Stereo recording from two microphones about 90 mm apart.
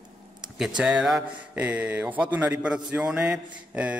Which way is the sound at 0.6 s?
10° right (ahead or behind).